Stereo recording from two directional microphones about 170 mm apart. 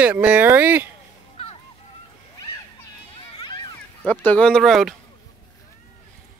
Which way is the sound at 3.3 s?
30° left (ahead or behind).